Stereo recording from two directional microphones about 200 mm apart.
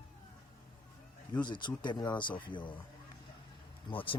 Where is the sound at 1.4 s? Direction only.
20° left (ahead or behind).